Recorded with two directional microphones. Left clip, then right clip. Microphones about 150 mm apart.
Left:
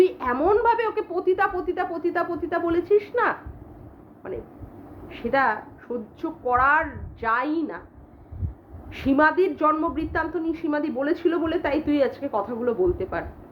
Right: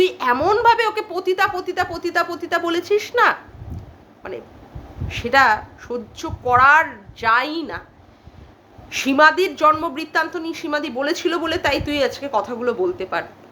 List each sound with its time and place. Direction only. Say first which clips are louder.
0.0 s speech: right 3 dB; 15° right (ahead or behind)
5.0 s speech: right 7 dB; 20° right (ahead or behind)
9.0 s speech: right 5 dB; 15° right (ahead or behind)